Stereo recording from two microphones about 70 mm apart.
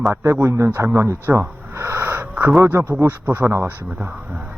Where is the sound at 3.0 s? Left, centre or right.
Right.